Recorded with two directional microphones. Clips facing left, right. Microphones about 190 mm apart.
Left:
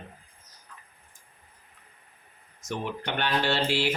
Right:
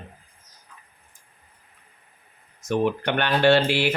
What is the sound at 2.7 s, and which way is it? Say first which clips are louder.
Speech: right 9 dB; 60° right (ahead or behind).